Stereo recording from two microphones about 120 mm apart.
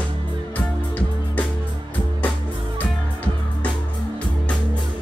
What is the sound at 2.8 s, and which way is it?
Music, 15° left (ahead or behind).